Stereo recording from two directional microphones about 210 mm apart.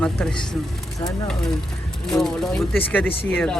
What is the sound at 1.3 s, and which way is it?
Speech, centre (ahead or behind).